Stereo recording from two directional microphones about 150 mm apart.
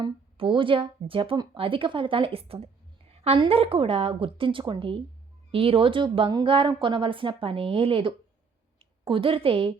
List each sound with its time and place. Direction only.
0.0 s speech: 35° right (ahead or behind)